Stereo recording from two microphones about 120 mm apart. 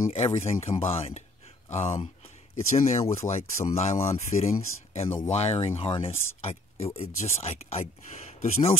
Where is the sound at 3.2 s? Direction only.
30° left (ahead or behind).